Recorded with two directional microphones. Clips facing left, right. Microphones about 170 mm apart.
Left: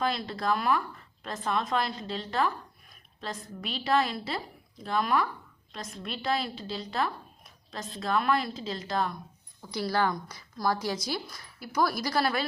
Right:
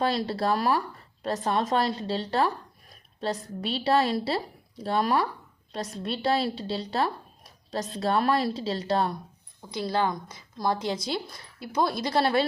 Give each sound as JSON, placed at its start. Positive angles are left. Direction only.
{"t": 0.0, "sound": "speech", "side_deg": -35}
{"t": 9.6, "sound": "a woman's voice", "side_deg": -20}